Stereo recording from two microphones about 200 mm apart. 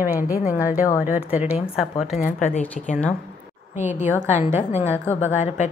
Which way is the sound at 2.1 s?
35° left (ahead or behind).